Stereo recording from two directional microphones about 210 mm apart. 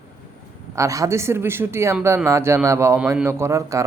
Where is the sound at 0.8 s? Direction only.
15° right (ahead or behind).